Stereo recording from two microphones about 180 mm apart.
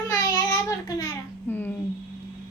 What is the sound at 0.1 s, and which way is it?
Child singing, 20° left (ahead or behind).